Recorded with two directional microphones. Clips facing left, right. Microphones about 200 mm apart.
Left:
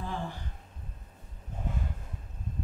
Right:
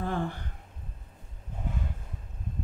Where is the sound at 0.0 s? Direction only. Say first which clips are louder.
Right 5 dB; 55° right (ahead or behind).